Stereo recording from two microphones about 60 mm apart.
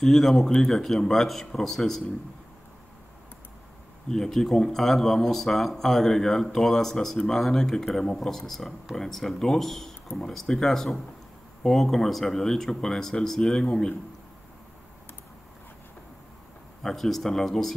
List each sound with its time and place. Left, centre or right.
0.0 s speech: centre
4.1 s speech: centre
16.8 s speech: centre